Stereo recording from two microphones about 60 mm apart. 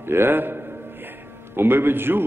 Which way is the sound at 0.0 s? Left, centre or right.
Right.